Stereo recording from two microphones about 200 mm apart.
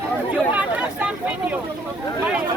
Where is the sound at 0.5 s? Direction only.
5° right (ahead or behind).